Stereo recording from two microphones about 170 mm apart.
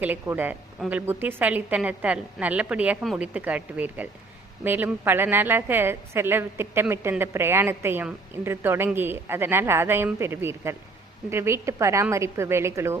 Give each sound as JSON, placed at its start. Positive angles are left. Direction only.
{"t": 0.0, "sound": "a woman's voice", "side_deg": -10}